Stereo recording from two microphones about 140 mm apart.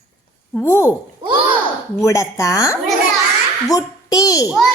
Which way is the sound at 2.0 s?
20° left (ahead or behind).